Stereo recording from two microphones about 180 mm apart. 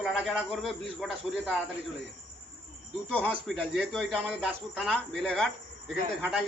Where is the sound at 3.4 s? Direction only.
Centre (ahead or behind).